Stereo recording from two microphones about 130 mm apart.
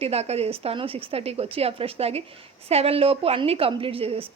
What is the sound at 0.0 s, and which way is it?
A woman's voice, 55° right (ahead or behind).